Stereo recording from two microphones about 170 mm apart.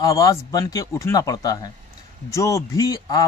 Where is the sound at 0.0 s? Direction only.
20° left (ahead or behind).